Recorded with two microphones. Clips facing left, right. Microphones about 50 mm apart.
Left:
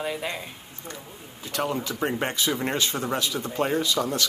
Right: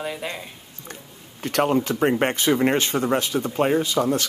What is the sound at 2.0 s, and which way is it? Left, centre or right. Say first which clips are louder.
Speech: right 5 dB; right.